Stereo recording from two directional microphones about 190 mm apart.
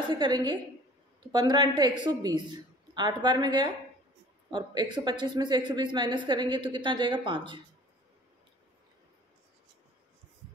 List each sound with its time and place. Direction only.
0.1 s speech: 25° right (ahead or behind)